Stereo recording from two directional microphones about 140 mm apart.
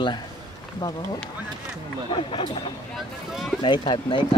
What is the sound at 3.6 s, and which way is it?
Speech, 35° left (ahead or behind).